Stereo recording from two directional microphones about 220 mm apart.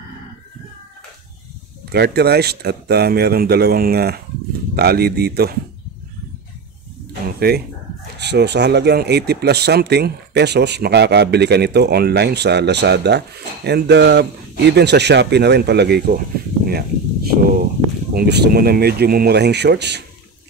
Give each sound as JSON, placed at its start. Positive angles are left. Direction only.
{"t": 1.9, "sound": "speech", "side_deg": -45}
{"t": 7.3, "sound": "speech", "side_deg": -45}